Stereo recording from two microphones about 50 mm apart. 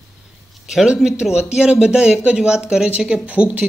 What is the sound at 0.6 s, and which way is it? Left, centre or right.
Speech, centre.